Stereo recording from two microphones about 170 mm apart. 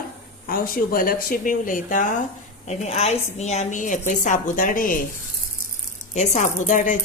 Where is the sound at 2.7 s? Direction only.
40° left (ahead or behind).